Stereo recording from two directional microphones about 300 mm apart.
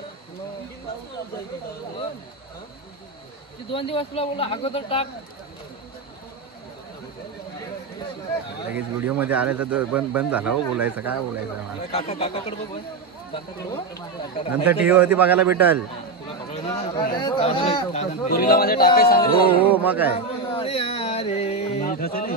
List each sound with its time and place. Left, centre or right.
3.7 s a man's voice: centre
8.7 s speech: centre
11.9 s a man's voice: centre
14.5 s speech: centre
16.6 s a man's voice: left
19.8 s speech: centre
20.2 s music: centre